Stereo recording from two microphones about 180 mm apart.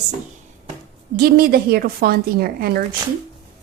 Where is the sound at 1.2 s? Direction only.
55° right (ahead or behind).